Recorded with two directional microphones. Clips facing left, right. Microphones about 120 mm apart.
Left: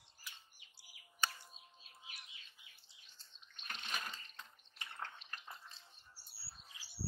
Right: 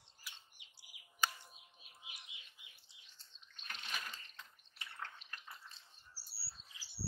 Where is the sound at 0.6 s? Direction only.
20° right (ahead or behind).